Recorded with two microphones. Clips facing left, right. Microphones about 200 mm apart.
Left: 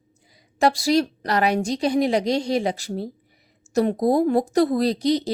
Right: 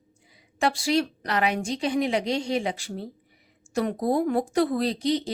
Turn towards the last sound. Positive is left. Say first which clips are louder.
# left 4 dB
turn(degrees=40)  # may be behind; listen again after turning